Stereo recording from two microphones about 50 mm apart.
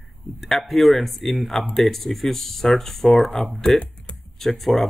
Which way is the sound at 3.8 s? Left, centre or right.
Left.